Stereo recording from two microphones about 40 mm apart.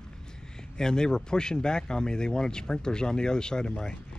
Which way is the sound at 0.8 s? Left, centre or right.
Centre.